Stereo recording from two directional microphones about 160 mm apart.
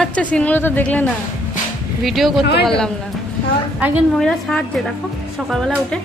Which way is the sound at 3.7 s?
10° right (ahead or behind).